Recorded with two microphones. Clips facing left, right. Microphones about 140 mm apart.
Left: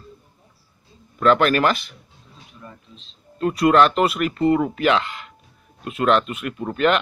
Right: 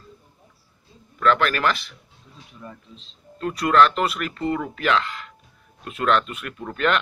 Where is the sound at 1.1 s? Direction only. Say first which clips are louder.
Left 4 dB; 25° left (ahead or behind).